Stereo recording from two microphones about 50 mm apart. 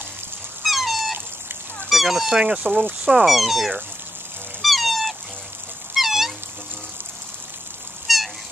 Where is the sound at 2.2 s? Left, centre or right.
Centre.